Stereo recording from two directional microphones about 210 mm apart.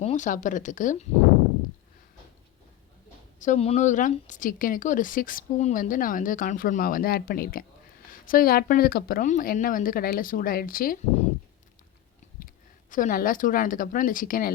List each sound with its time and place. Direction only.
0.0 s speech: 35° left (ahead or behind)
3.4 s speech: 35° left (ahead or behind)
12.4 s a sound: 40° left (ahead or behind)
12.9 s speech: 40° left (ahead or behind)